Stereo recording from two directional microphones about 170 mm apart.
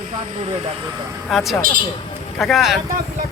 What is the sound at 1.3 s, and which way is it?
Speech, centre (ahead or behind).